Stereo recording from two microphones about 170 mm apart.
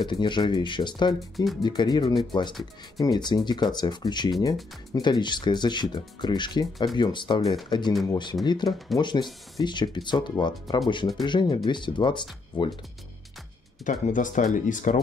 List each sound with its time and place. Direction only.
0.0 s speech: 25° left (ahead or behind)
1.3 s speech: centre (ahead or behind)
1.6 s speech: 25° left (ahead or behind)
8.6 s speech: centre (ahead or behind)
8.9 s speech: 25° left (ahead or behind)
13.8 s speech: 50° left (ahead or behind)